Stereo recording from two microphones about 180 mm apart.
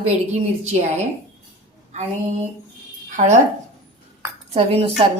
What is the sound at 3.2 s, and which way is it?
Speech, 50° right (ahead or behind).